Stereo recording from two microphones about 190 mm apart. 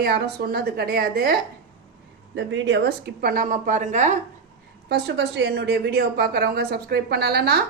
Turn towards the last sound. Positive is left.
turn(degrees=-55)  # may be behind; listen again after turning